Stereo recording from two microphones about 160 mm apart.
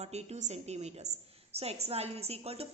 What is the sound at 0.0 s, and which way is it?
A woman's voice, 40° right (ahead or behind).